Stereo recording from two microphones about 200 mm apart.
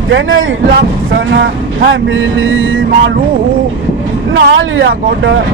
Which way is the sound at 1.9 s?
75° right (ahead or behind).